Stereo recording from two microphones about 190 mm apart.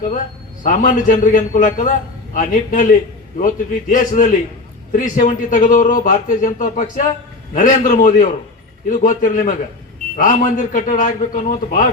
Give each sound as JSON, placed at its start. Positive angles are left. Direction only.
{"t": 0.6, "sound": "speech", "side_deg": 45}